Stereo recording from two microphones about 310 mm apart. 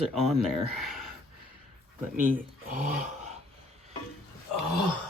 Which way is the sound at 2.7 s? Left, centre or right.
Right.